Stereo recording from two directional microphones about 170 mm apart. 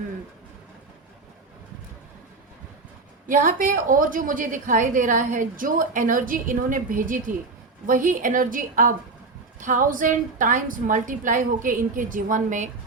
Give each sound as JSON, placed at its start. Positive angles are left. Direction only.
{"t": 3.2, "sound": "a woman's voice", "side_deg": -50}